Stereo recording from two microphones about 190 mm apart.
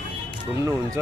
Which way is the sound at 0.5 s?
15° right (ahead or behind).